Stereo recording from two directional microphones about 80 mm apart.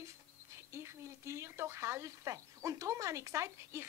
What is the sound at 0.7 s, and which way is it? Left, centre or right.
Speech, right.